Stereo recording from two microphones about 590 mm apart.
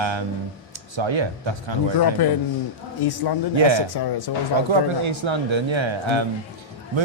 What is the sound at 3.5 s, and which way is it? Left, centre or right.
Speech, right.